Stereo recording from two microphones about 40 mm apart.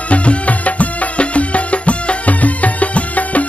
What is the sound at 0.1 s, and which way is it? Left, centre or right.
Music, left.